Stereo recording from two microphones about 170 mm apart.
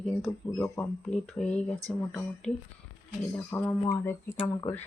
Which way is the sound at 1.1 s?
5° left (ahead or behind).